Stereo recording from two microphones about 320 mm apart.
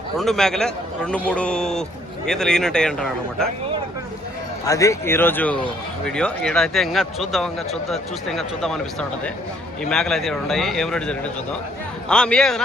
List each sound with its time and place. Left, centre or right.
0.2 s a man's voice: centre
4.6 s a man's voice: centre